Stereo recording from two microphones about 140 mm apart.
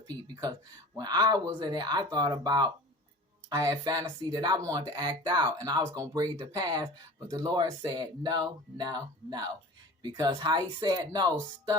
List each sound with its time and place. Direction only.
0.1 s speech: 25° right (ahead or behind)